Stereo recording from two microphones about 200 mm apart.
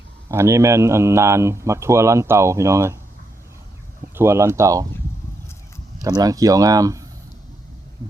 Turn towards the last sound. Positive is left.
turn(degrees=-15)  # may be behind; listen again after turning